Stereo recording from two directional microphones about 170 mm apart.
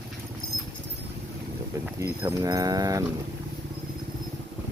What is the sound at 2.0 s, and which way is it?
Speech, 15° right (ahead or behind).